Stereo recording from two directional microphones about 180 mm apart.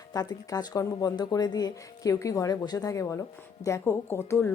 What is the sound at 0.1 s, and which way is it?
Speech, 20° left (ahead or behind).